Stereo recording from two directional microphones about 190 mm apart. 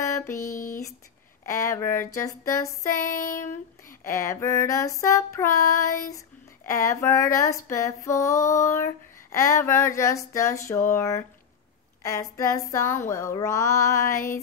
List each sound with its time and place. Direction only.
0.0 s a sound: 15° left (ahead or behind)
1.4 s speech: 15° left (ahead or behind)
3.0 s child singing: 45° left (ahead or behind)
4.0 s speech: 15° left (ahead or behind)